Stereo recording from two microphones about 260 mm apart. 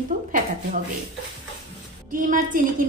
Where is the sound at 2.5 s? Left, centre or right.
Right.